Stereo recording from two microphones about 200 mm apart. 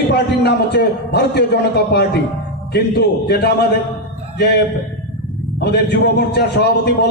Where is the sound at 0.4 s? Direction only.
55° left (ahead or behind).